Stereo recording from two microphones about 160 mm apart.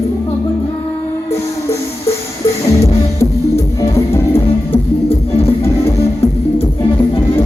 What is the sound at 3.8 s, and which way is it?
Music, 15° left (ahead or behind).